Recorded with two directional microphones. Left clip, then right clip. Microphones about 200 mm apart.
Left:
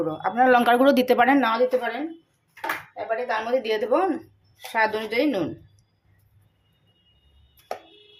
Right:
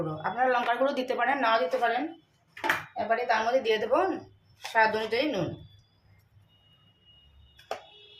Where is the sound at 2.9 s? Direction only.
30° left (ahead or behind).